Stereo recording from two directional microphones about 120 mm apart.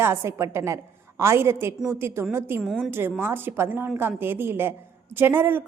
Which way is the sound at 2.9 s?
20° right (ahead or behind).